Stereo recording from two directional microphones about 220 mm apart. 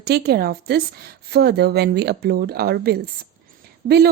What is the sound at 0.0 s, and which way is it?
Speech, 45° right (ahead or behind).